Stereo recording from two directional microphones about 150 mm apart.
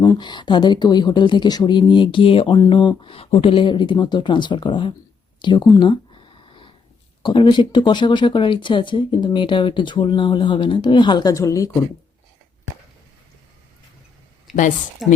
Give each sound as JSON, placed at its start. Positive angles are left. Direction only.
{"t": 0.0, "sound": "speech", "side_deg": 25}
{"t": 5.4, "sound": "a sound", "side_deg": 30}
{"t": 7.2, "sound": "speech", "side_deg": 30}
{"t": 15.0, "sound": "speech", "side_deg": 0}